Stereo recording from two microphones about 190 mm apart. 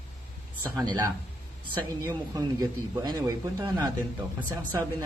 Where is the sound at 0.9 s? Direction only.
15° right (ahead or behind).